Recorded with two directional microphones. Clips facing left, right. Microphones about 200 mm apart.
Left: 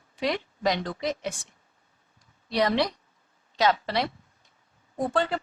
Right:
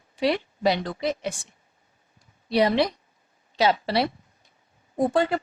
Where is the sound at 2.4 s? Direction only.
10° right (ahead or behind).